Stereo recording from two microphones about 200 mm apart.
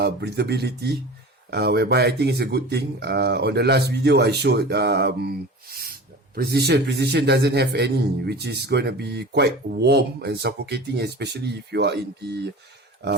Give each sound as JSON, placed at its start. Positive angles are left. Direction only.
{"t": 0.0, "sound": "speech", "side_deg": -55}